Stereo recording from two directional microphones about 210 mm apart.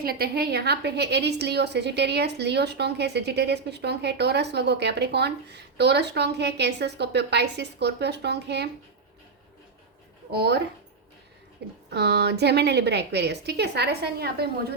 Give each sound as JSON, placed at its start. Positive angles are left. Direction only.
{"t": 0.0, "sound": "a woman's voice", "side_deg": -45}
{"t": 10.3, "sound": "a woman's voice", "side_deg": -50}
{"t": 11.9, "sound": "a woman's voice", "side_deg": -50}